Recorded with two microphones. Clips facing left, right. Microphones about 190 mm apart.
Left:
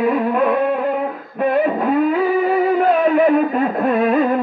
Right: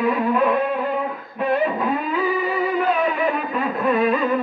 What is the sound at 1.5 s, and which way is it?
Music, 55° left (ahead or behind).